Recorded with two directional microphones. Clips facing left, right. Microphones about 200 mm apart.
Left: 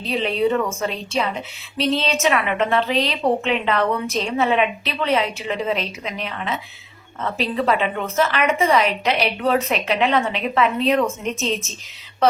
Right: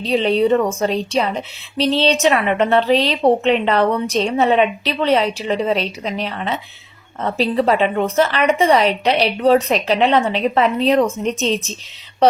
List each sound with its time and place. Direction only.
0.0 s a woman's voice: 35° right (ahead or behind)